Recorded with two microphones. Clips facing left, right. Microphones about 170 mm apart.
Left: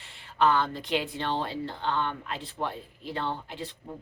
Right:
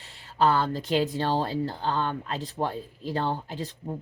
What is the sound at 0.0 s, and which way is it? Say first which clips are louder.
Speech: right 1 dB; 40° right (ahead or behind).